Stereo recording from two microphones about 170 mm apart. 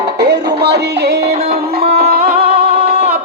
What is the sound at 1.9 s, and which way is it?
Music, 60° right (ahead or behind).